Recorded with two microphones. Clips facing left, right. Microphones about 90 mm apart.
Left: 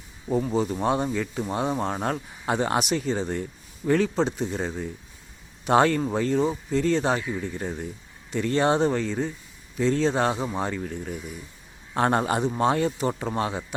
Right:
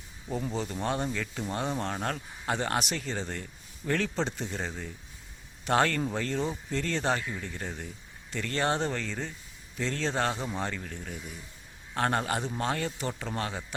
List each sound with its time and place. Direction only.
0.4 s a man's voice: 10° left (ahead or behind)